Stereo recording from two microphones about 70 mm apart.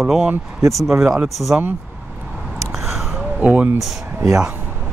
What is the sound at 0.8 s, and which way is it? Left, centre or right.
Speech, right.